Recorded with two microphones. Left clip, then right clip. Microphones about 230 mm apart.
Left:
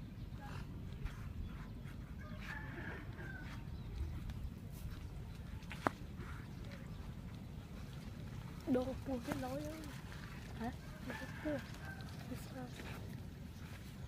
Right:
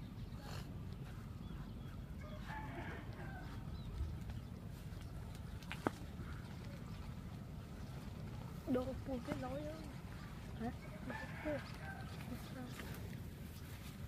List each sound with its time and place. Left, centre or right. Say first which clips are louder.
8.7 s speech: left 2 dB; left
10.6 s livestock: even; left